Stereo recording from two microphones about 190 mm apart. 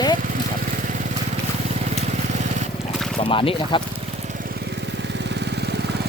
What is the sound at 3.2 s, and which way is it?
Speech, 30° left (ahead or behind).